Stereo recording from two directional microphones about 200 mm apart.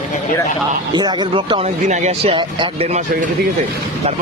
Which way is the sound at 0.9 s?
20° right (ahead or behind).